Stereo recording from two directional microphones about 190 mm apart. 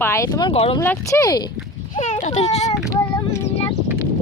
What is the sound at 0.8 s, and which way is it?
Speech, 15° left (ahead or behind).